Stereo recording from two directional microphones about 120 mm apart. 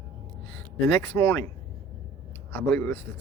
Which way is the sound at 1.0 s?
20° left (ahead or behind).